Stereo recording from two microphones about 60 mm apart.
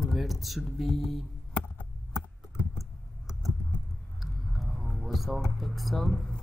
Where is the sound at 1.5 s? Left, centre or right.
Left.